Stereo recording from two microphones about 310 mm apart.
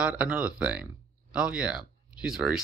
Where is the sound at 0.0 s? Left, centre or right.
Centre.